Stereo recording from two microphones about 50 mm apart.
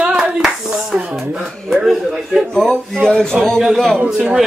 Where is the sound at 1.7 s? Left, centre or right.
Centre.